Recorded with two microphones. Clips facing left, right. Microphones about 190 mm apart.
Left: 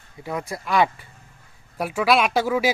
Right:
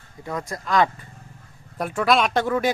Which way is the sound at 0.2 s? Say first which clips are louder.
Left 1 dB; 10° left (ahead or behind).